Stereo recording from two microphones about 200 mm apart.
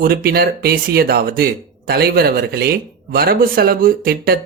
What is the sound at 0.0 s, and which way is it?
Speech, 50° right (ahead or behind).